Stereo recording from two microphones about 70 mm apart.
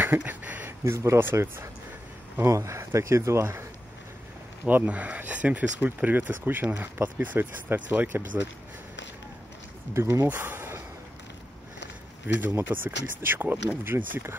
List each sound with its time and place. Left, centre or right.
0.0 s a sound: right
0.8 s speech: right
4.6 s speech: right
9.9 s speech: right
10.2 s speech: right
12.4 s speech: right